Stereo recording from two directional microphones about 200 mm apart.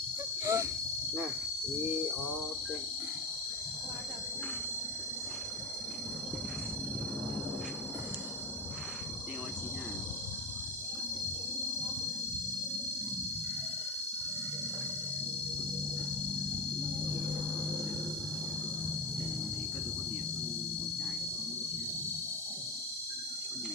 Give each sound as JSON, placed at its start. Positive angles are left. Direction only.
{"t": 0.4, "sound": "cricket", "side_deg": -15}